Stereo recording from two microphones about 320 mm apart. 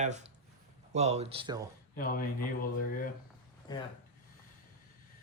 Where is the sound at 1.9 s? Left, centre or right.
Left.